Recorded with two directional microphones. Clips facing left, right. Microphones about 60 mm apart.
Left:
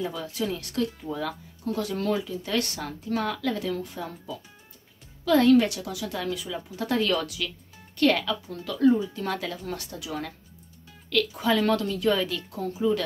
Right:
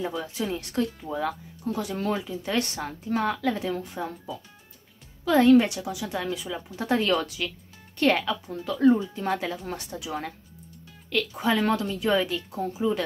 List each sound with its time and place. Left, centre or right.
0.1 s speech: right
5.2 s speech: right